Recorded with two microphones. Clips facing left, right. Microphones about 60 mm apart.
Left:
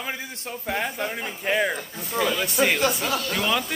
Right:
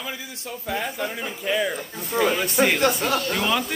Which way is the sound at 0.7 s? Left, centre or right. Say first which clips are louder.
Even; left.